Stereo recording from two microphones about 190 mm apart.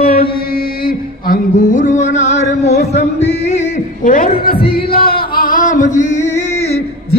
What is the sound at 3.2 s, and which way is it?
Music, 35° left (ahead or behind).